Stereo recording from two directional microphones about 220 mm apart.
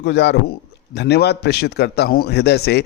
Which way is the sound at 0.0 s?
50° left (ahead or behind).